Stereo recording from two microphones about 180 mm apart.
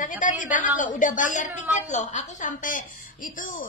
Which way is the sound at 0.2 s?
45° left (ahead or behind).